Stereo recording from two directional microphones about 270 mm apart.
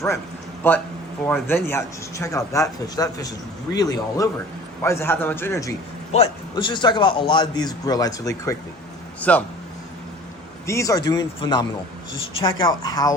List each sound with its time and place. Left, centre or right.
0.6 s a man's voice: centre
10.7 s a man's voice: centre